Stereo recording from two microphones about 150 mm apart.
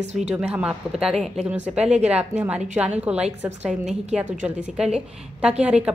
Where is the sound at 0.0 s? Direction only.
50° right (ahead or behind).